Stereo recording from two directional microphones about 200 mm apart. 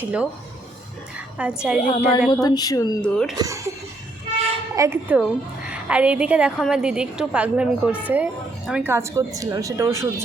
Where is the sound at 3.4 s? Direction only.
15° right (ahead or behind).